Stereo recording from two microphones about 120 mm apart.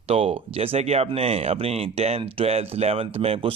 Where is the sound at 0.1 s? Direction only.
60° right (ahead or behind).